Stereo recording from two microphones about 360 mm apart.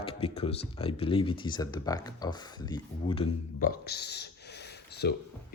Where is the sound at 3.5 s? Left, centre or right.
Left.